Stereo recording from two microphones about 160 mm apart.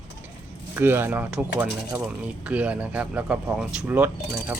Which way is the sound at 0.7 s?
15° right (ahead or behind).